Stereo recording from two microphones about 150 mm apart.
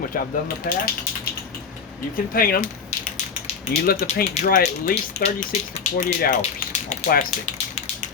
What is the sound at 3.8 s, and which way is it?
Speech, 90° left.